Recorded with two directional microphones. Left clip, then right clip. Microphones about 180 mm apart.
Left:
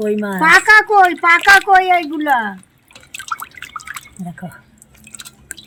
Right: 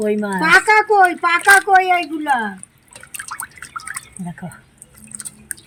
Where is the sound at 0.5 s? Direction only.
15° left (ahead or behind).